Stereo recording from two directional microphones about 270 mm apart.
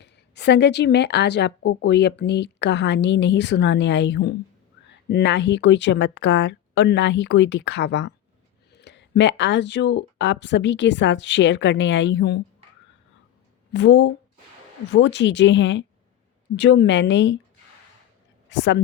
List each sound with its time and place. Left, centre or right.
0.0 s speech: left
13.7 s speech: left
18.4 s a woman's voice: left